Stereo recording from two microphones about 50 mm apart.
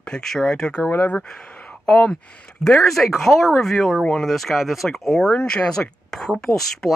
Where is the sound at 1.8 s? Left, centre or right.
Centre.